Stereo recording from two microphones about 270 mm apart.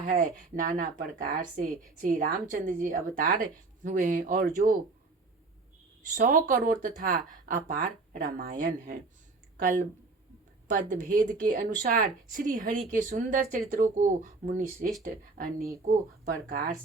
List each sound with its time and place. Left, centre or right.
0.0 s speech: right
6.1 s speech: right